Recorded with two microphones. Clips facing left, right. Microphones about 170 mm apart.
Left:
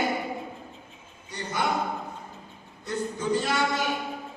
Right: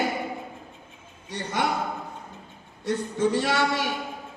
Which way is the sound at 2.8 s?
90° right.